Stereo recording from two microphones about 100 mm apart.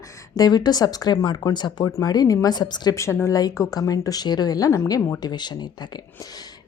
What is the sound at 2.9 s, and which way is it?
A woman's voice, 30° left (ahead or behind).